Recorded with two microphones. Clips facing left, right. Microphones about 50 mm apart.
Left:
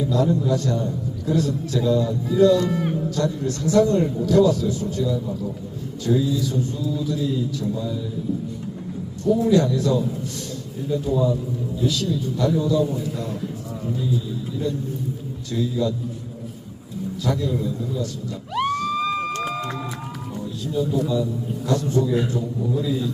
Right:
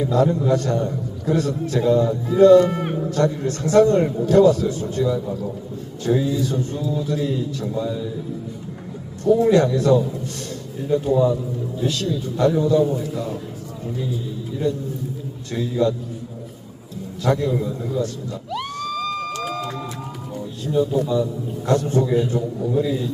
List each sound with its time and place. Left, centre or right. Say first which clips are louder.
0.0 s a man's voice: right 2 dB; right
9.4 s a man's voice: right 1 dB; right
11.8 s a man's voice: even; right
15.5 s speech: right 3 dB; right
17.2 s a man's voice: right 4 dB; right
18.5 s a sound: left 5 dB; left
19.4 s music: even; centre
20.7 s a man's voice: right 3 dB; right